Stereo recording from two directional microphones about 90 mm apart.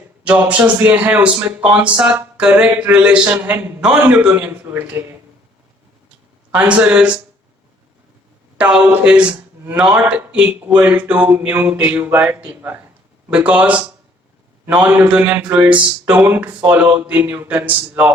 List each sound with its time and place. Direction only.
0.3 s speech: 15° right (ahead or behind)
6.5 s speech: 15° right (ahead or behind)
8.5 s speech: 10° right (ahead or behind)